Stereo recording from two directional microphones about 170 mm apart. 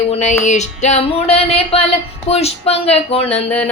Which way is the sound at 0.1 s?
45° left (ahead or behind).